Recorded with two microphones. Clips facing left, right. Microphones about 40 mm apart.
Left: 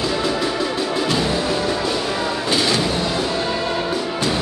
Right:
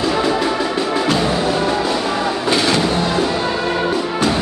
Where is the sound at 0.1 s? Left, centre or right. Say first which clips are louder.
Right 4 dB; right.